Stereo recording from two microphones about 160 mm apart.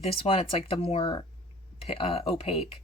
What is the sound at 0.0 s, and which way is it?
Speech, 35° left (ahead or behind).